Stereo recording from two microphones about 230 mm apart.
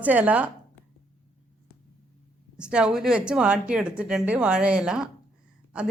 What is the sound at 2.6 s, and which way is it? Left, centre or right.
Speech, centre.